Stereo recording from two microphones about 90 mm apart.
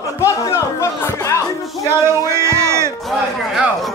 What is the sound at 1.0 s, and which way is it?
Music, 25° left (ahead or behind).